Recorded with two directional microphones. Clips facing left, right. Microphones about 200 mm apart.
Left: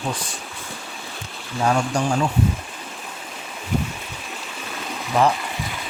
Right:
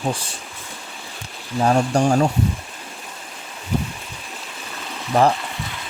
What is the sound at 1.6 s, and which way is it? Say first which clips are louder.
Speech: right 3 dB; 35° right (ahead or behind).